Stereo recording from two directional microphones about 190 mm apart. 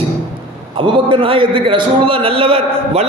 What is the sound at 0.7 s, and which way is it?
A man's voice, 25° right (ahead or behind).